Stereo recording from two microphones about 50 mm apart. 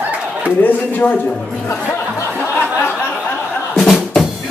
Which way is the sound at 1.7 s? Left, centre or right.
Left.